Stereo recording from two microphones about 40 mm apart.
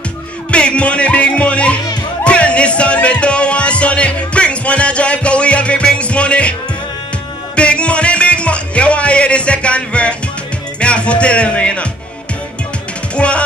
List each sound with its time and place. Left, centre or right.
0.5 s music: left
7.5 s music: left
10.8 s speech: left
13.1 s music: left